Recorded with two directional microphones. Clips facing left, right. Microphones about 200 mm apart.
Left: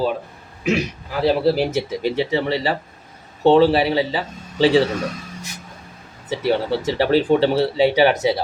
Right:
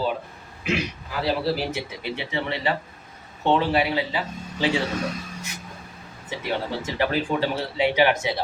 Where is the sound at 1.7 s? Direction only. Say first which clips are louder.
Left 9 dB; 40° left (ahead or behind).